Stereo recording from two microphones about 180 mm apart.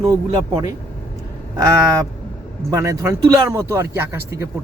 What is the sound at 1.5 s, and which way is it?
Speech, 20° right (ahead or behind).